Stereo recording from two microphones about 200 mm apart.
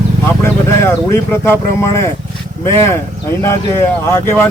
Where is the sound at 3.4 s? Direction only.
10° left (ahead or behind).